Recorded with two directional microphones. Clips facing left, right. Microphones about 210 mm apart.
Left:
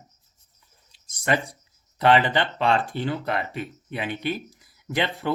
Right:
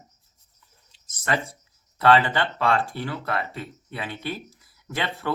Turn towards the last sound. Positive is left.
turn(degrees=15)  # may be behind; listen again after turning